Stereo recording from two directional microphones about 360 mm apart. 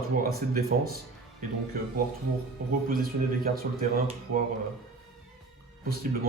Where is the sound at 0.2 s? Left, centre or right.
Right.